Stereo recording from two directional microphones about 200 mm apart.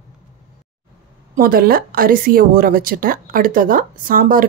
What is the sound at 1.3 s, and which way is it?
A woman's voice, 45° right (ahead or behind).